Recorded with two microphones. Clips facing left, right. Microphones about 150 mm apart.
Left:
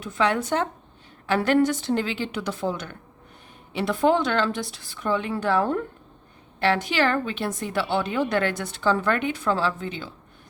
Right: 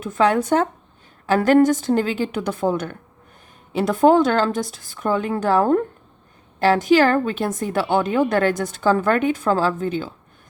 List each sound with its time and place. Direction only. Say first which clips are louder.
0.0 s a woman's voice: right 5 dB; 45° right (ahead or behind)